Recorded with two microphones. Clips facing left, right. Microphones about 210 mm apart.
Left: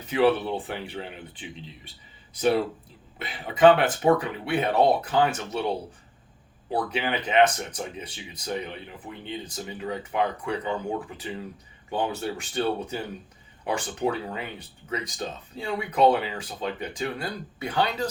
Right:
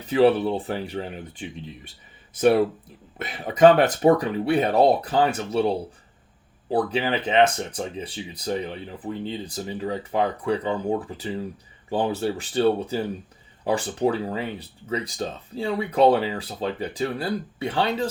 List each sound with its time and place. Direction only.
0.0 s speech: 35° right (ahead or behind)